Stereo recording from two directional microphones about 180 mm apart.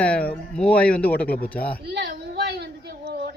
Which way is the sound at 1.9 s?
65° right (ahead or behind).